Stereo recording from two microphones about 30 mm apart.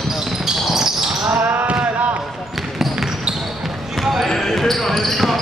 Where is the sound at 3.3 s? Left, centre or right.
Centre.